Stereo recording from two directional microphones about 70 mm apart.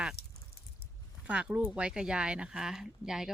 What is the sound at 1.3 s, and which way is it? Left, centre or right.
Speech, centre.